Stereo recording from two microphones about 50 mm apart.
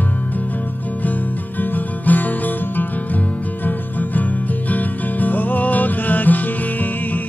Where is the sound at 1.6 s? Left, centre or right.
Left.